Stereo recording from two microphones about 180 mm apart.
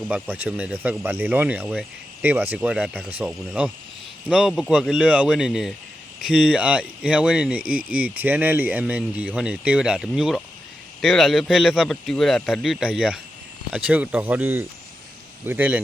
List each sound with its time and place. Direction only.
0.1 s speech: 10° right (ahead or behind)
7.6 s speech: 50° right (ahead or behind)
7.9 s speech: 10° right (ahead or behind)